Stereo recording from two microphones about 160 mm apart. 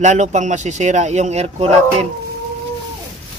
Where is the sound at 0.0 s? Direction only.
50° right (ahead or behind).